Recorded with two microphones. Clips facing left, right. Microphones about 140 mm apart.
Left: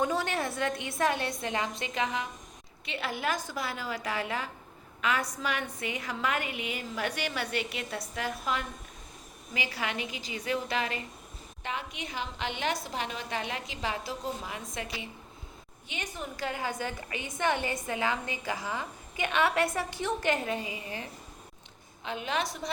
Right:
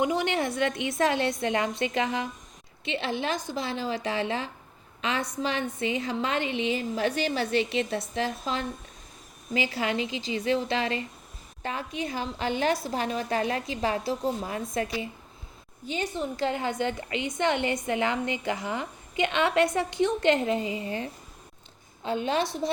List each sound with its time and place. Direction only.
0.0 s a woman's voice: 15° right (ahead or behind); by 14.8 s 40° right (ahead or behind)
15.9 s a woman's voice: 30° right (ahead or behind)